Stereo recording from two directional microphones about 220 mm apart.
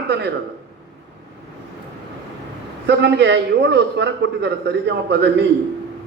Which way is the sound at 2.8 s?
50° right (ahead or behind).